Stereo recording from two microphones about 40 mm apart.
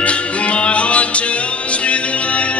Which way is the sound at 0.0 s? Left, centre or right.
Left.